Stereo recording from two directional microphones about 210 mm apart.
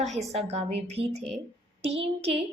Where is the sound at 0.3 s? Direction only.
30° right (ahead or behind).